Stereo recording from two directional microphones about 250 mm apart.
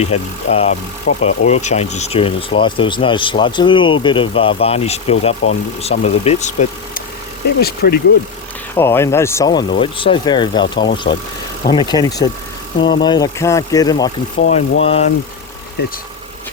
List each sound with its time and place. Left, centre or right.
0.0 s speech: left
7.6 s speech: left
8.7 s speech: centre
15.8 s speech: left